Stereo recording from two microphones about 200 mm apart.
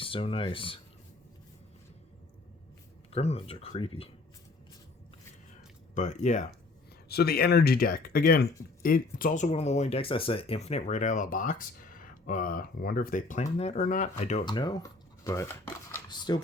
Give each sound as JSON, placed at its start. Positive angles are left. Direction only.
{"t": 0.0, "sound": "speech", "side_deg": 25}
{"t": 3.1, "sound": "speech", "side_deg": 30}
{"t": 5.9, "sound": "speech", "side_deg": 35}
{"t": 7.1, "sound": "speech", "side_deg": 50}
{"t": 14.4, "sound": "speech", "side_deg": 20}